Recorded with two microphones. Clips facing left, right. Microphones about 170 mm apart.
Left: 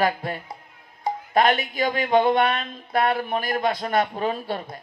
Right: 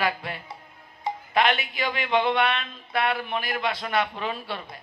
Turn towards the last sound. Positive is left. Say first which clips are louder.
# left 5 dB
turn(degrees=45)  # may be behind; listen again after turning